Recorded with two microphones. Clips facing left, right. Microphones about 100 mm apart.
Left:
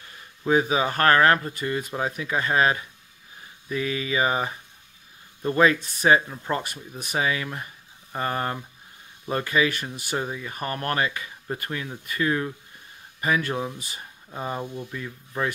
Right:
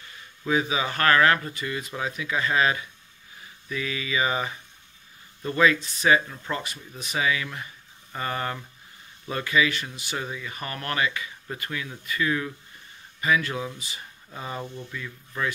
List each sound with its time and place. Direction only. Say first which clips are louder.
0.5 s speech: left 4 dB; 40° left (ahead or behind)
6.2 s speech: left 3 dB; 25° left (ahead or behind)
6.5 s speech: left 4 dB; 50° left (ahead or behind); by 8.6 s 30° left (ahead or behind)
9.3 s speech: left 1 dB; 40° left (ahead or behind)
10.1 s speech: left 4 dB; 30° left (ahead or behind)
10.5 s speech: left 5 dB; 40° left (ahead or behind)
14.6 s speech: left 3 dB; 10° left (ahead or behind)
14.9 s speech: left 2 dB; 30° left (ahead or behind)